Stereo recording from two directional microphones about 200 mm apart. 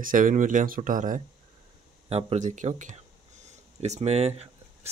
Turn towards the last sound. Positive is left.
turn(degrees=-30)  # may be behind; listen again after turning